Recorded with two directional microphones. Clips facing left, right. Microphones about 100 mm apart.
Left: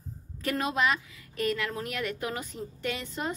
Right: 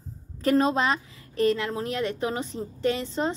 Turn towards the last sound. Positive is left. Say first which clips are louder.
# right 7 dB
turn(degrees=-30)  # may be behind; listen again after turning